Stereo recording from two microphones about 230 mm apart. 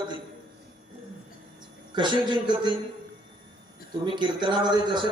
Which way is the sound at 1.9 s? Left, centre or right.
Centre.